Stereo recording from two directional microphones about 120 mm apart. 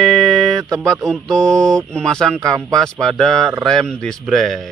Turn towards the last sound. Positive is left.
turn(degrees=0)  # may be behind; listen again after turning